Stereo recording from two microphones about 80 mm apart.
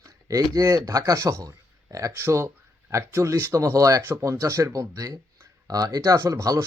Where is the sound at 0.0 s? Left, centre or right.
Right.